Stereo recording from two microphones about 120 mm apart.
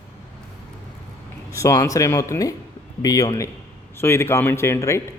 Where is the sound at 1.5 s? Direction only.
25° left (ahead or behind).